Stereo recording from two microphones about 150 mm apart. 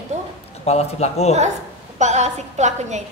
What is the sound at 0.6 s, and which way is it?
Speech, 45° left (ahead or behind).